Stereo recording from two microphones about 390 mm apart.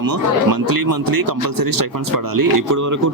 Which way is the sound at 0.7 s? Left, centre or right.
Right.